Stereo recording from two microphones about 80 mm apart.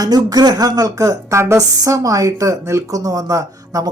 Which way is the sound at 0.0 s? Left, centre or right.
Right.